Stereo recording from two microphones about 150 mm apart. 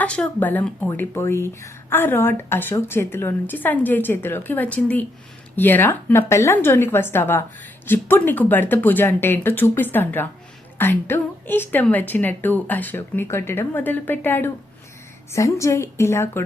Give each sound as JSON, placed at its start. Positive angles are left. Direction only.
{"t": 0.0, "sound": "a woman's voice", "side_deg": 10}